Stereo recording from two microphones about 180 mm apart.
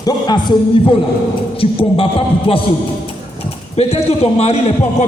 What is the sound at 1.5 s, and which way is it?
A man's voice, 30° left (ahead or behind).